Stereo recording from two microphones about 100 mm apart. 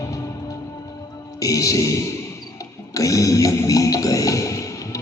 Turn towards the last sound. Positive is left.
turn(degrees=35)  # may be behind; listen again after turning